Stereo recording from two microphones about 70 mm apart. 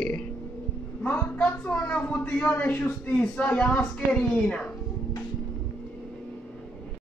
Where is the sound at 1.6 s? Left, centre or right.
Centre.